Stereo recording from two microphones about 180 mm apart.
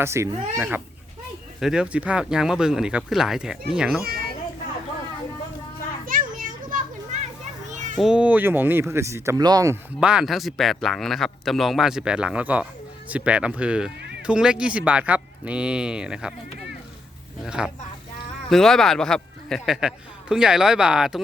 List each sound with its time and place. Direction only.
0.0 s speech: 15° right (ahead or behind)
1.5 s speech: 5° right (ahead or behind)
4.0 s children playing: 55° right (ahead or behind)
6.1 s children playing: 50° right (ahead or behind)
7.9 s speech: 5° right (ahead or behind); by 9.7 s 20° right (ahead or behind)
10.0 s speech: 5° right (ahead or behind)
17.4 s speech: 5° right (ahead or behind)